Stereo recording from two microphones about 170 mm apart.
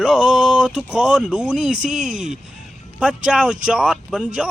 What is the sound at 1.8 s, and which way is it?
Speech, 50° right (ahead or behind).